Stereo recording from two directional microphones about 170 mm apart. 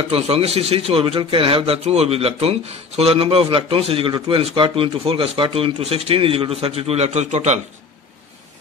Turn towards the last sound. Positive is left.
turn(degrees=-40)  # may be behind; listen again after turning